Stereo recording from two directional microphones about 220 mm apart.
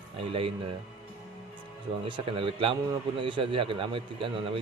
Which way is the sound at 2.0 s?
25° right (ahead or behind).